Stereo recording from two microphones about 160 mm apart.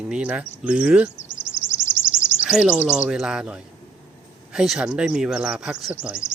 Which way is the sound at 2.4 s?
5° right (ahead or behind).